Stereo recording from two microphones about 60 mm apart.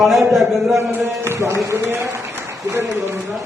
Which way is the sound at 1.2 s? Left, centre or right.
Right.